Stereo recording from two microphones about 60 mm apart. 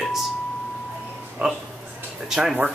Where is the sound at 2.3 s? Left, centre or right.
Centre.